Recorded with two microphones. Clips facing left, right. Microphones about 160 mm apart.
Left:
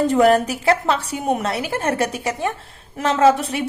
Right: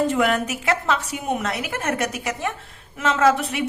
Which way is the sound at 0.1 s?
35° left (ahead or behind).